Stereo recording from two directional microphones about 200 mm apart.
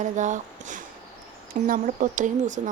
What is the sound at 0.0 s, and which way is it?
Speech, 35° right (ahead or behind).